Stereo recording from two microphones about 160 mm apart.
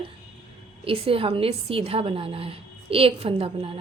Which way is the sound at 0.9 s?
35° right (ahead or behind).